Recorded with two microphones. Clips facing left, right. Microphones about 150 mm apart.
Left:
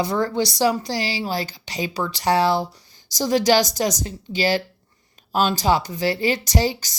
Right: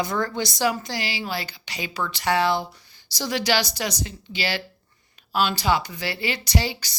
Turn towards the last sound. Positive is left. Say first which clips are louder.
# left 4 dB
turn(degrees=40)  # may be behind; listen again after turning